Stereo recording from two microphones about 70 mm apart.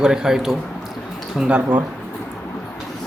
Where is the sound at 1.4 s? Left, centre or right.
Right.